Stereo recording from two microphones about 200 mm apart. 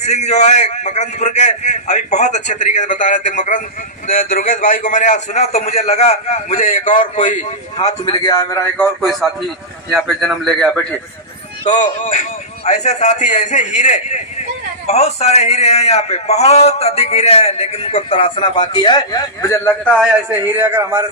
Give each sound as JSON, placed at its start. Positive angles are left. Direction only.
{"t": 0.0, "sound": "a man's voice", "side_deg": 35}
{"t": 8.1, "sound": "speech", "side_deg": 20}
{"t": 9.0, "sound": "a man's voice", "side_deg": 0}
{"t": 11.6, "sound": "a man's voice", "side_deg": 35}
{"t": 20.4, "sound": "a man's voice", "side_deg": -10}